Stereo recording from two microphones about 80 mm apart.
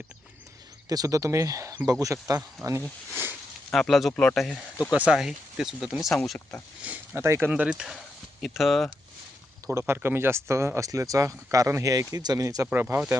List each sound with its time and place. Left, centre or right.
0.9 s speech: right
2.6 s speech: centre
4.9 s speech: centre
5.1 s speech: centre
6.8 s a sound: right
7.2 s speech: right
7.5 s speech: centre
9.7 s speech: right
12.7 s speech: right